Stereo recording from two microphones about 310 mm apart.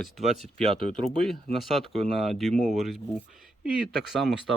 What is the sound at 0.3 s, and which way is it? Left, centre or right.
Speech, centre.